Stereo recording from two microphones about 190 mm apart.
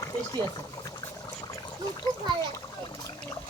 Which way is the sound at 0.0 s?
20° left (ahead or behind).